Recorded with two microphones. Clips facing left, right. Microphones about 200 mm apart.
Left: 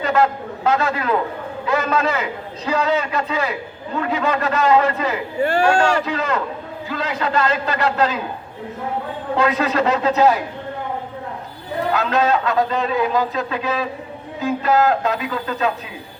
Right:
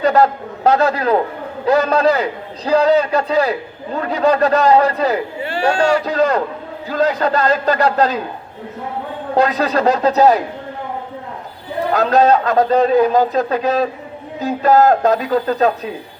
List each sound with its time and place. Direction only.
0.0 s a man's voice: 40° right (ahead or behind)
5.4 s speech: 45° left (ahead or behind)
5.6 s a man's voice: 35° right (ahead or behind)
9.3 s a man's voice: 40° right (ahead or behind)
11.9 s a man's voice: 40° right (ahead or behind)